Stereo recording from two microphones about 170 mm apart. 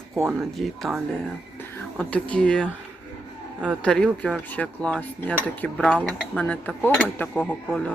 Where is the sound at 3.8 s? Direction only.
5° left (ahead or behind).